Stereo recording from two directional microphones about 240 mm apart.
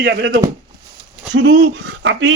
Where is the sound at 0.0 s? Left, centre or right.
Right.